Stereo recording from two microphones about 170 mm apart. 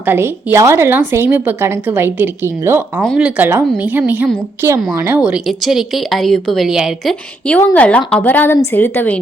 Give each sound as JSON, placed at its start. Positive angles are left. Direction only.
{"t": 0.0, "sound": "a woman's voice", "side_deg": -10}